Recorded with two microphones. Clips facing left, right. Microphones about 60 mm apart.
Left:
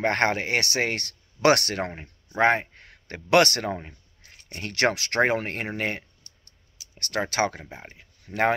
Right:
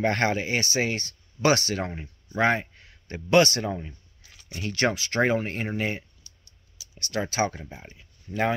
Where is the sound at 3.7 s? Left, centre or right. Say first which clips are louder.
Left 1 dB; left.